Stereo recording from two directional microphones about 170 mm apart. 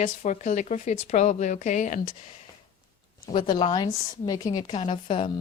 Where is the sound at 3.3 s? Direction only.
30° left (ahead or behind).